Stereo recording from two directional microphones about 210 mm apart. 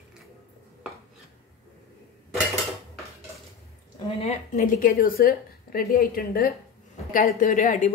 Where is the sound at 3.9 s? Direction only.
30° left (ahead or behind).